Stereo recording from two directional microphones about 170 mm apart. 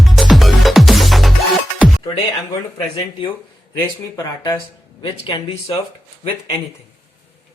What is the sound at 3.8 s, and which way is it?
Speech, 20° left (ahead or behind).